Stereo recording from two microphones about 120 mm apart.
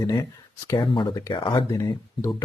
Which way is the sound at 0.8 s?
45° left (ahead or behind).